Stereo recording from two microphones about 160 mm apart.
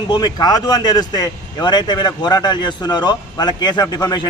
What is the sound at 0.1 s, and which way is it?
Speech, 25° left (ahead or behind).